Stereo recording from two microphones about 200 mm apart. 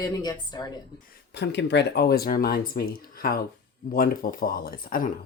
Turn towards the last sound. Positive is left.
turn(degrees=45)  # may be behind; listen again after turning